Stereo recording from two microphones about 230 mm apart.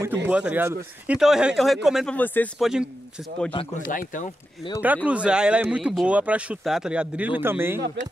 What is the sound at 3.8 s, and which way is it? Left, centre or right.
Speech, left.